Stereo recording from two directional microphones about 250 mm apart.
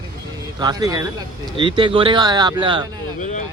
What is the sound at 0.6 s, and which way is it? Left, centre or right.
Speech, centre.